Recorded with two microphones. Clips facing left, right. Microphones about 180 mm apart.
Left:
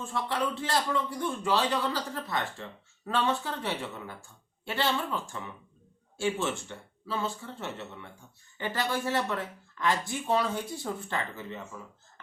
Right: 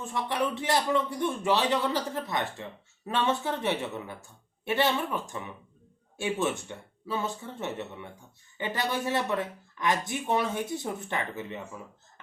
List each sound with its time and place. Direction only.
0.0 s speech: 20° right (ahead or behind)